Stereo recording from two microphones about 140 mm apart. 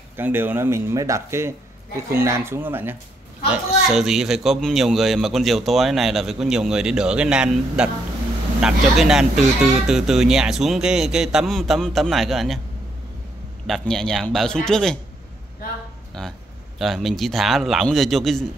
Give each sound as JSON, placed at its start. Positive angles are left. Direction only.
{"t": 0.1, "sound": "speech", "side_deg": -15}
{"t": 3.9, "sound": "a man's voice", "side_deg": -5}
{"t": 13.7, "sound": "a man's voice", "side_deg": 5}
{"t": 16.2, "sound": "a man's voice", "side_deg": 0}